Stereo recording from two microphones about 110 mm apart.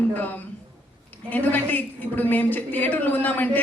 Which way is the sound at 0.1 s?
15° left (ahead or behind).